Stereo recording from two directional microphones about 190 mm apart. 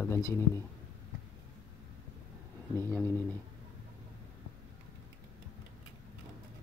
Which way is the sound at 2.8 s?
10° left (ahead or behind).